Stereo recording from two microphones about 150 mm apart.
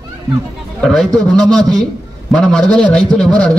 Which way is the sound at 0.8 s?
5° left (ahead or behind).